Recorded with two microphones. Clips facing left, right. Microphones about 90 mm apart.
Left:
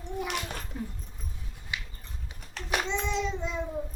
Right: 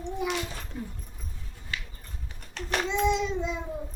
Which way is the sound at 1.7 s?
15° left (ahead or behind).